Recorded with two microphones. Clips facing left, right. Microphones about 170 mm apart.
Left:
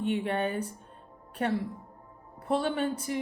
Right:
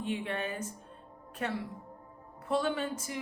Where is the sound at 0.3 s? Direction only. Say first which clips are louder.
Left 6 dB; 35° left (ahead or behind).